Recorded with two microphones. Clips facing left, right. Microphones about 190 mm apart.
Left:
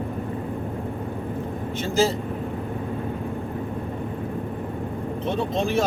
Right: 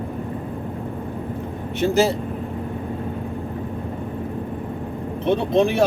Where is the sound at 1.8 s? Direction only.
65° right (ahead or behind).